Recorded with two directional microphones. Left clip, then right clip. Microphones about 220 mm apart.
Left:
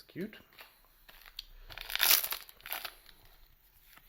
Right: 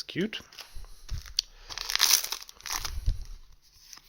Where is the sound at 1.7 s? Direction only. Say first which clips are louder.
Right 5 dB; 5° right (ahead or behind).